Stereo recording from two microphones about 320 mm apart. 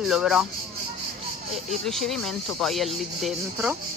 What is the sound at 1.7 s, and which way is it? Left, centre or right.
Speech, centre.